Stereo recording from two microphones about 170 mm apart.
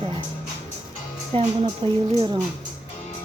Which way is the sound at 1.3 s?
35° right (ahead or behind).